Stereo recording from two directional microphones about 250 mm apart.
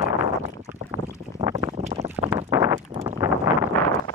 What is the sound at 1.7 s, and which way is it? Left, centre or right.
Boat, right.